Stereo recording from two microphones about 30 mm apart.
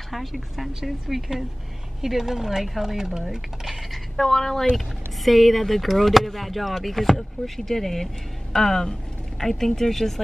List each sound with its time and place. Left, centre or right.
0.1 s speech: centre
1.0 s speech: centre
4.2 s speech: centre
4.7 s speech: centre